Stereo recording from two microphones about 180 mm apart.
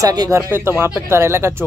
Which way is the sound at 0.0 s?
20° right (ahead or behind).